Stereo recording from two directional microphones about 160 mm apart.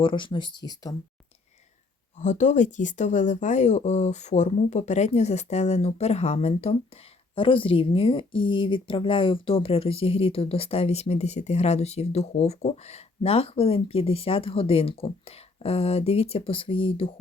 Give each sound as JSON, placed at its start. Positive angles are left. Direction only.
{"t": 0.0, "sound": "speech", "side_deg": 30}
{"t": 2.1, "sound": "speech", "side_deg": 50}